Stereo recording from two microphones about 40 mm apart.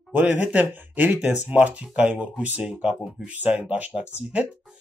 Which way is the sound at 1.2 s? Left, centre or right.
Right.